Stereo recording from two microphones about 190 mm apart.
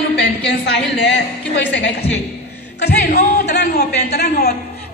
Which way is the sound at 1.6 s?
65° left (ahead or behind).